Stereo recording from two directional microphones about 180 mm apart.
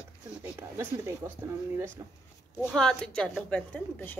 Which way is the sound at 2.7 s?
5° left (ahead or behind).